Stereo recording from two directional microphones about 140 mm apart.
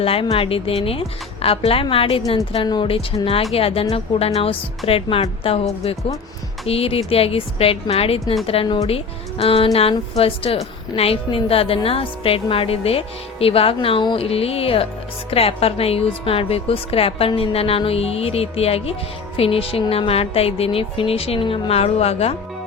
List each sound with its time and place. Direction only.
0.0 s a woman's voice: 40° left (ahead or behind)
4.9 s a woman's voice: 40° left (ahead or behind)
6.7 s a woman's voice: 45° left (ahead or behind)